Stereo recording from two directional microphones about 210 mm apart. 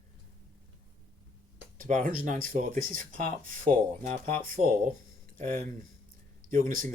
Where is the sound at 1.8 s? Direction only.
40° right (ahead or behind).